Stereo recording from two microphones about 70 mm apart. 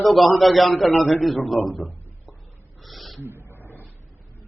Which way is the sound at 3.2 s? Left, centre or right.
Right.